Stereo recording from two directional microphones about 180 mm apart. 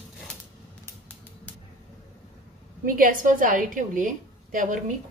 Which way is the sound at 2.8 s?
50° right (ahead or behind).